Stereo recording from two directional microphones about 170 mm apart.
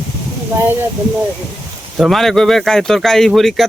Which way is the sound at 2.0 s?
Centre (ahead or behind).